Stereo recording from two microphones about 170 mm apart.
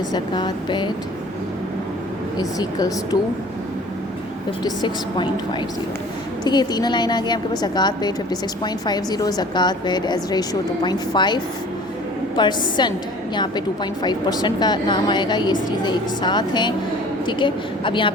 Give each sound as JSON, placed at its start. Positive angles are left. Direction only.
{"t": 0.1, "sound": "a woman's voice", "side_deg": 25}
{"t": 2.4, "sound": "a woman's voice", "side_deg": 20}
{"t": 4.6, "sound": "a woman's voice", "side_deg": 25}
{"t": 12.4, "sound": "a woman's voice", "side_deg": 25}
{"t": 14.0, "sound": "a woman's voice", "side_deg": 25}